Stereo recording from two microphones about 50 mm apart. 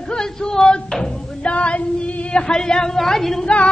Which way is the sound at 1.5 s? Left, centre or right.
Left.